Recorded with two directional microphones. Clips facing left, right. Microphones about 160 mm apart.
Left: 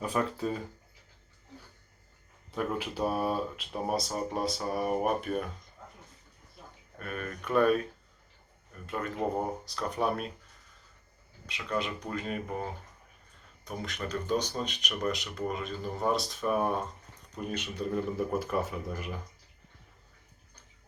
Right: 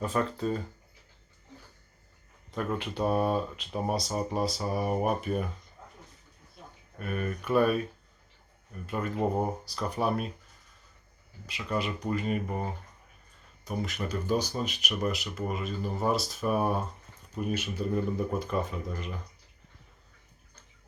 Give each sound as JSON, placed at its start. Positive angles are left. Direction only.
{"t": 0.0, "sound": "speech", "side_deg": 5}
{"t": 2.5, "sound": "speech", "side_deg": 5}
{"t": 7.0, "sound": "speech", "side_deg": -10}
{"t": 8.9, "sound": "speech", "side_deg": -5}
{"t": 11.4, "sound": "speech", "side_deg": -5}
{"t": 13.7, "sound": "speech", "side_deg": -5}